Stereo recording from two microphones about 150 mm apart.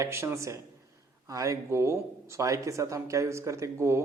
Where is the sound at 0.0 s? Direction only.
15° right (ahead or behind).